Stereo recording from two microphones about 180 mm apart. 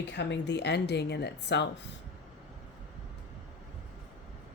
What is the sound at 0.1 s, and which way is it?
A woman's voice, 75° left (ahead or behind).